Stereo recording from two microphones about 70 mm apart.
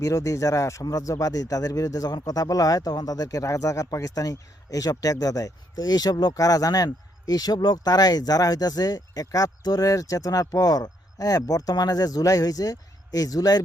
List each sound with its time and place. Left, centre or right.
0.0 s speech: left
6.3 s speech: left